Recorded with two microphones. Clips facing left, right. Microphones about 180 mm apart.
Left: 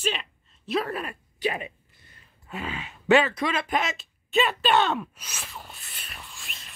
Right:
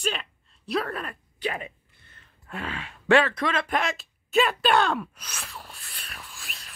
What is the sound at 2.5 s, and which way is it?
Speech, 5° left (ahead or behind).